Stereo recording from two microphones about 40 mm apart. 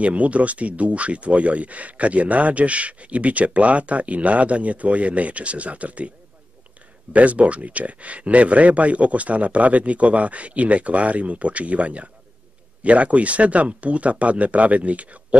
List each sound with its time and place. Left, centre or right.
0.0 s speech: right
7.1 s speech: right